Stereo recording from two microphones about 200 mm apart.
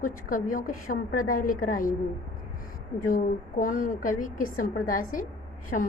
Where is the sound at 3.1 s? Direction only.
40° left (ahead or behind).